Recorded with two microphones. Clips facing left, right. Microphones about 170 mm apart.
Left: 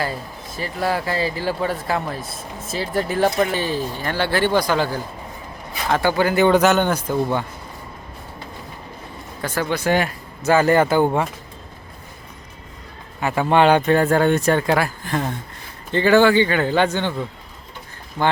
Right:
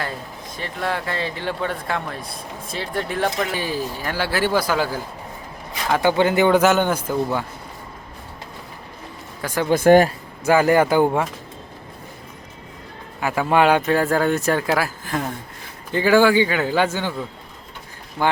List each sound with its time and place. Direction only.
0.0 s speech: 5° left (ahead or behind)
3.5 s speech: 10° right (ahead or behind)
5.9 s speech: 20° right (ahead or behind)
9.6 s speech: 50° right (ahead or behind)
10.4 s speech: 10° right (ahead or behind)
13.1 s speech: 5° right (ahead or behind)
18.2 s speech: 10° right (ahead or behind)